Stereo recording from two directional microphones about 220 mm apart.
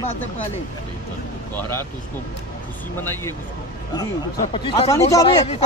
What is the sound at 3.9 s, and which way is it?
Speech, 20° left (ahead or behind).